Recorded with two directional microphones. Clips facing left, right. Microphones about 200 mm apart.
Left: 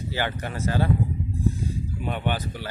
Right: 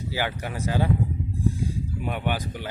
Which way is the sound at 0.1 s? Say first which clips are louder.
Even; 10° right (ahead or behind).